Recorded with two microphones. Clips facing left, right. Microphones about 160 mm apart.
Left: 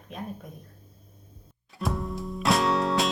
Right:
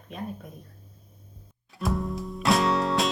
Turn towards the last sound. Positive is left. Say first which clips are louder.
# even
turn(degrees=0)  # may be behind; listen again after turning